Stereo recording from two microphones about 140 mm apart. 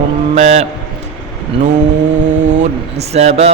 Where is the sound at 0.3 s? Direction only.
50° right (ahead or behind).